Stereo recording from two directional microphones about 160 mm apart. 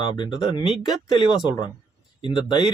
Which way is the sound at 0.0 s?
30° left (ahead or behind).